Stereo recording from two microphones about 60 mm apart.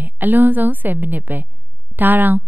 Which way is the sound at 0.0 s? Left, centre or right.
Right.